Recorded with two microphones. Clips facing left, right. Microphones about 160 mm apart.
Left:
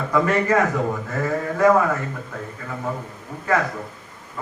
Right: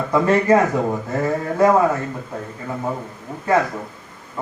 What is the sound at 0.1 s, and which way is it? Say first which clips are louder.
Speech: right 4 dB; 30° right (ahead or behind).